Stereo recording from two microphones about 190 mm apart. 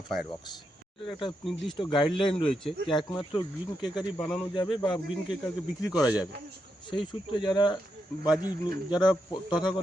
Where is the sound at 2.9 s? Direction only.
25° left (ahead or behind).